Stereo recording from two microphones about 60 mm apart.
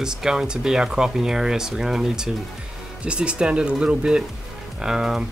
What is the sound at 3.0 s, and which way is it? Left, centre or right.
Speech, centre.